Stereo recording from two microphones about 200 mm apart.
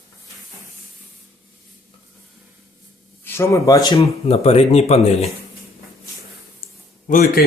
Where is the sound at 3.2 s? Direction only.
15° left (ahead or behind).